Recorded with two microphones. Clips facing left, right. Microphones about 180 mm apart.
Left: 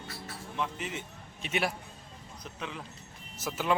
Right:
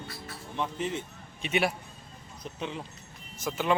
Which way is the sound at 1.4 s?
Centre (ahead or behind).